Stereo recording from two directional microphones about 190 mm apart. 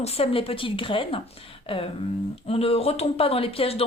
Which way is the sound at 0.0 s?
30° left (ahead or behind).